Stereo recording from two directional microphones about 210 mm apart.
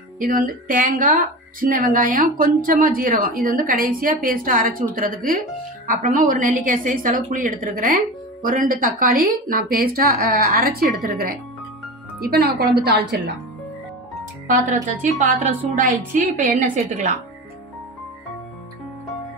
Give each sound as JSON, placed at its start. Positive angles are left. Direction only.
{"t": 0.2, "sound": "a woman's voice", "side_deg": -40}
{"t": 14.5, "sound": "speech", "side_deg": -35}